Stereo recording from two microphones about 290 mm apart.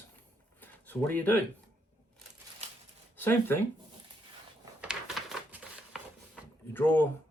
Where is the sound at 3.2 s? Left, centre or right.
Centre.